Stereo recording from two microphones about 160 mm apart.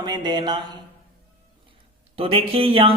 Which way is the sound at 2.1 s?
35° right (ahead or behind).